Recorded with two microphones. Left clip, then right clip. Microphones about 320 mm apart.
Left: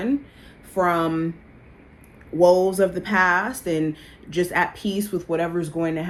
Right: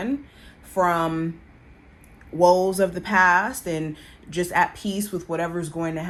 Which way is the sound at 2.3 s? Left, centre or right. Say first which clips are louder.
Left 1 dB; right.